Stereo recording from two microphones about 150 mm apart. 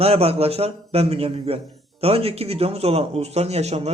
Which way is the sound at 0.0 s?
40° right (ahead or behind).